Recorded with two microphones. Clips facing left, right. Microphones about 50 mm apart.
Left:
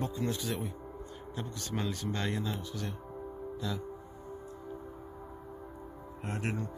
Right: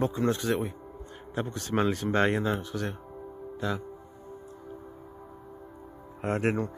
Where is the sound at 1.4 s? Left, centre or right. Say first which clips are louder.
Right 9 dB; right.